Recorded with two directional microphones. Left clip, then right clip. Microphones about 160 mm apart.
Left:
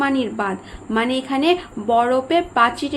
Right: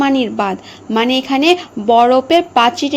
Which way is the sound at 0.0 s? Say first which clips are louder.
Right 6 dB; 35° right (ahead or behind).